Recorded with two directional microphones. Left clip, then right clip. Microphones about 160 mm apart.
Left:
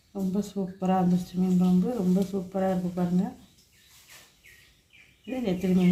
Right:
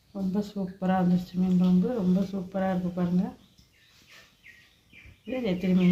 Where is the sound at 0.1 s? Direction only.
Centre (ahead or behind).